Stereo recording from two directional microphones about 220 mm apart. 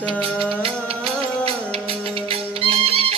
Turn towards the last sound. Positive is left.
turn(degrees=-25)  # may be behind; listen again after turning